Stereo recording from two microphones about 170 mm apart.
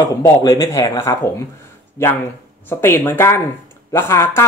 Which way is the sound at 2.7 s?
15° left (ahead or behind).